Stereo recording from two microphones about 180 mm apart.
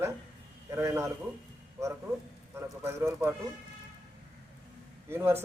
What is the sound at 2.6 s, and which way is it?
Speech, 15° right (ahead or behind).